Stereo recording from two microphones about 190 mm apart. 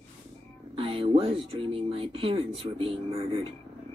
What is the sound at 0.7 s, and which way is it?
Speech, 30° right (ahead or behind).